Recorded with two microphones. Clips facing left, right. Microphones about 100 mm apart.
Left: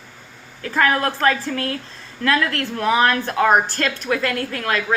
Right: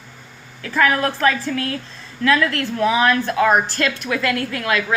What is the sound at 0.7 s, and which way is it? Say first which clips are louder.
A woman's voice: right 1 dB; 45° left (ahead or behind).